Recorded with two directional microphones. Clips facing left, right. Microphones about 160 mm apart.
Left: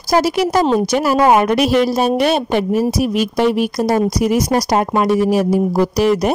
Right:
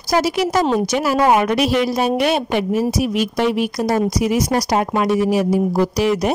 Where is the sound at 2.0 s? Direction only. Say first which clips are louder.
Left 2 dB; 35° left (ahead or behind).